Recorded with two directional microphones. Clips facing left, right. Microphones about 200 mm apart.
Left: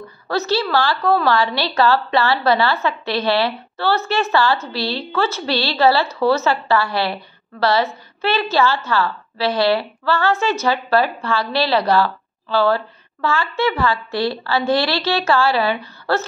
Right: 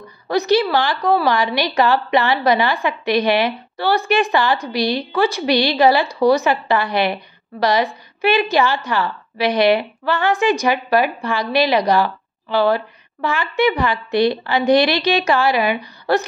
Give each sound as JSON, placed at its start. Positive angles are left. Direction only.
{"t": 0.3, "sound": "a woman's voice", "side_deg": -15}